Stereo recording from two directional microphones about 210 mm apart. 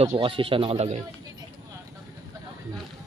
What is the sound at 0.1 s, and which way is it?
Speech, 25° right (ahead or behind).